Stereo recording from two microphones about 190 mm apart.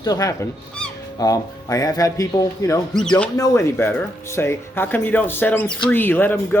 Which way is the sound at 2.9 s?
5° left (ahead or behind).